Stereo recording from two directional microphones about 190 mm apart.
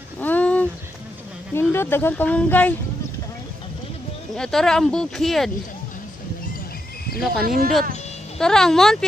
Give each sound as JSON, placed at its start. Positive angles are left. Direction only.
{"t": 0.2, "sound": "a sound", "side_deg": 10}
{"t": 1.5, "sound": "speech", "side_deg": 10}
{"t": 4.4, "sound": "speech", "side_deg": 5}
{"t": 7.4, "sound": "speech", "side_deg": -50}
{"t": 8.4, "sound": "speech", "side_deg": 5}